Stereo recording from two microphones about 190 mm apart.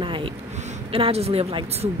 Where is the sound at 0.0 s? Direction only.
25° right (ahead or behind).